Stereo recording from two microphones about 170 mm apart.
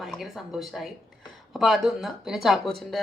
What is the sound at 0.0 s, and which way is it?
Speech, centre (ahead or behind).